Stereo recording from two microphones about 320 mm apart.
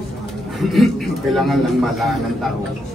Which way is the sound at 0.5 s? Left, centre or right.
Centre.